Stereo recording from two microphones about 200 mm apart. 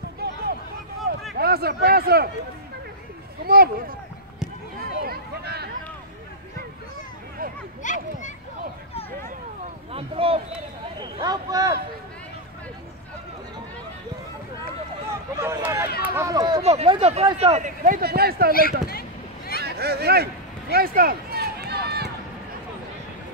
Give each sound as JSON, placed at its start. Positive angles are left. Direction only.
{"t": 0.2, "sound": "a sound", "side_deg": -55}
{"t": 1.3, "sound": "speech", "side_deg": -50}
{"t": 3.4, "sound": "speech", "side_deg": -50}
{"t": 4.7, "sound": "a sound", "side_deg": -50}
{"t": 7.8, "sound": "children playing", "side_deg": 40}
{"t": 9.9, "sound": "speech", "side_deg": -30}
{"t": 15.0, "sound": "a sound", "side_deg": -15}
{"t": 16.0, "sound": "speech", "side_deg": -15}
{"t": 16.6, "sound": "speech", "side_deg": -30}
{"t": 18.9, "sound": "a sound", "side_deg": 50}
{"t": 19.6, "sound": "speech", "side_deg": -55}
{"t": 20.7, "sound": "run", "side_deg": -45}